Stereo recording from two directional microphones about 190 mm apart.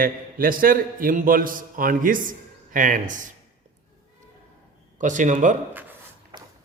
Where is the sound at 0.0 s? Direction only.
50° right (ahead or behind).